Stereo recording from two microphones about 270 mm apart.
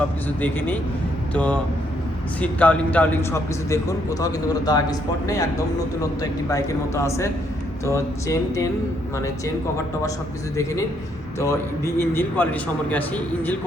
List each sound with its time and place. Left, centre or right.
1.3 s a man's voice: centre
11.3 s a man's voice: centre